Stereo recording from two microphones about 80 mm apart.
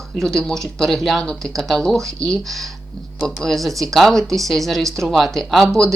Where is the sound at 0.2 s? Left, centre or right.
Centre.